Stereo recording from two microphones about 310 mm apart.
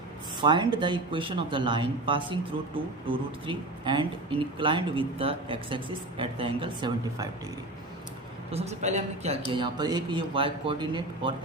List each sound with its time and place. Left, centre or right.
0.4 s speech: centre
8.5 s a woman's voice: right